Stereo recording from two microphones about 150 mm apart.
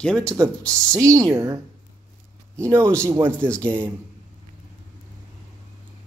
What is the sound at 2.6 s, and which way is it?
Speech, 20° right (ahead or behind).